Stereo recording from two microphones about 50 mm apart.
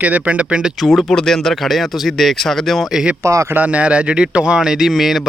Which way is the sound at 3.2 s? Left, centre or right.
Right.